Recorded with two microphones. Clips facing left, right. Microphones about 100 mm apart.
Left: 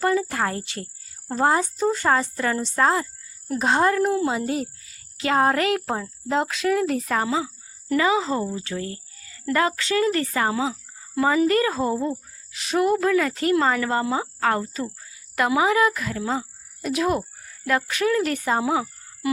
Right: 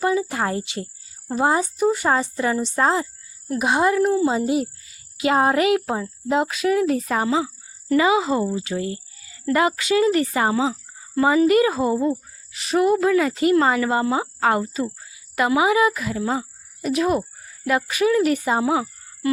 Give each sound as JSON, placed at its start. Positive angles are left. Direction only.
{"t": 0.0, "sound": "insect", "side_deg": -15}
{"t": 1.5, "sound": "speech", "side_deg": -15}
{"t": 4.0, "sound": "speech", "side_deg": 0}
{"t": 4.4, "sound": "speech", "side_deg": -15}